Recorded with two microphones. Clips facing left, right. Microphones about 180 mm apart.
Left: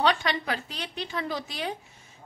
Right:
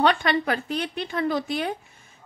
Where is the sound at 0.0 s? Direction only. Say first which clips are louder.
Right 4 dB; 55° right (ahead or behind).